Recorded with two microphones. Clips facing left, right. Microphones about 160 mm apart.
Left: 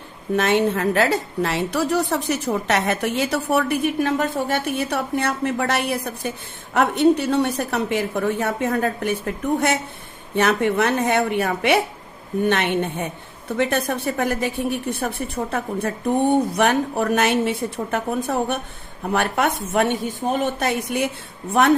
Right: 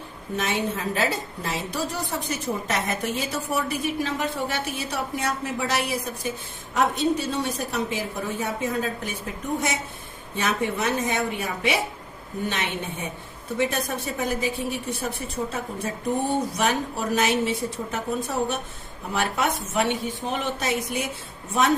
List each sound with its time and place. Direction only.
0.3 s a woman's voice: 65° left (ahead or behind)